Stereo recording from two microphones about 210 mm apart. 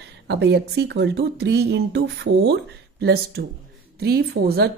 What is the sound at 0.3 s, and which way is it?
Speech, 55° right (ahead or behind).